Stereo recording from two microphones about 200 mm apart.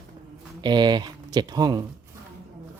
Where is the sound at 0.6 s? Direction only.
20° right (ahead or behind).